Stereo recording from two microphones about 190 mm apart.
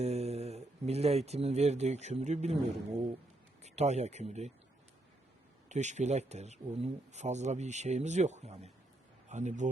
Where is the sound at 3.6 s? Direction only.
35° right (ahead or behind).